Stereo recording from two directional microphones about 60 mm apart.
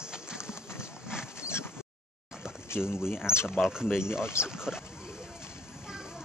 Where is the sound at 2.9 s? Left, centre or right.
Left.